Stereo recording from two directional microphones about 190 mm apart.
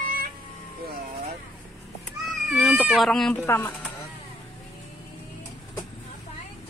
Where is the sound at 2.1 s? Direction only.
Centre (ahead or behind).